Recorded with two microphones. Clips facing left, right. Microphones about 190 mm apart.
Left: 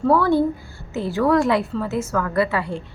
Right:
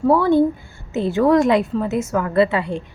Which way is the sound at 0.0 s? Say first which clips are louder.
Right 2 dB; 20° right (ahead or behind).